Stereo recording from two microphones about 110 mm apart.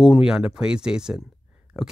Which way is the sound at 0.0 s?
5° right (ahead or behind).